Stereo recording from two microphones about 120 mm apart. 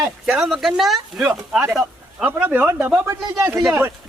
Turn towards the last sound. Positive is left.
turn(degrees=-20)  # may be behind; listen again after turning